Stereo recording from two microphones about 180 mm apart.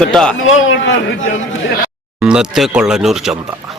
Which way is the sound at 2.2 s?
5° right (ahead or behind).